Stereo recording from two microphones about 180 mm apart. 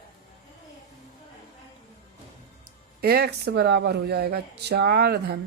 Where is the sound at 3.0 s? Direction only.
60° right (ahead or behind).